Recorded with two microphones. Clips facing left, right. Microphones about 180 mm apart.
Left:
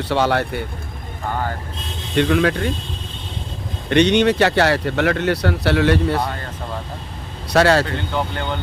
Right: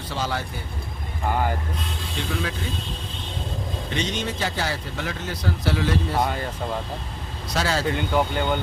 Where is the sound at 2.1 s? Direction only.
70° left (ahead or behind).